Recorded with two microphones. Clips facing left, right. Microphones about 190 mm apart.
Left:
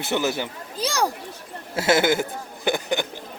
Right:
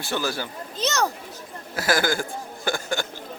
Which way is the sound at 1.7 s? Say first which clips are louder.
Left 4 dB; 25° left (ahead or behind).